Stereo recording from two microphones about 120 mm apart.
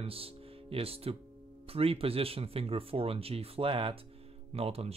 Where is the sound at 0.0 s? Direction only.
50° right (ahead or behind).